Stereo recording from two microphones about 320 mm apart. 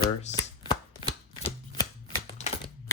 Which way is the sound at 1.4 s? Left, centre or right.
Centre.